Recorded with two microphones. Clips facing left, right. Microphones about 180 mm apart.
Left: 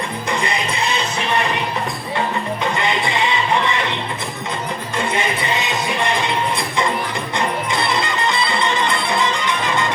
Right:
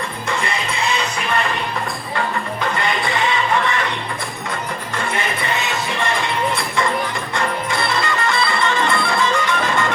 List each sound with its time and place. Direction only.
0.3 s music: 20° left (ahead or behind)
2.7 s music: 20° left (ahead or behind)
4.9 s music: 20° left (ahead or behind)